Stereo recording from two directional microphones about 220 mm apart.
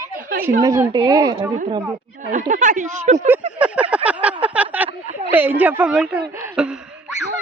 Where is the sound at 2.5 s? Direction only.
35° right (ahead or behind).